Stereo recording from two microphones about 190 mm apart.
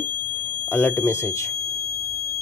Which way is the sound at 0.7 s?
10° left (ahead or behind).